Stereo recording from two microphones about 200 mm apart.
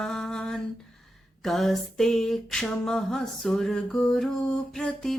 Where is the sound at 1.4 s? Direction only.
Centre (ahead or behind).